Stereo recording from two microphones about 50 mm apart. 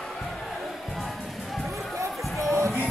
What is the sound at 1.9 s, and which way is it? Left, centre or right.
Music, right.